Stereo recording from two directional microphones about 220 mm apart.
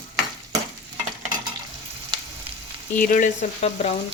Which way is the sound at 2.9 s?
40° left (ahead or behind).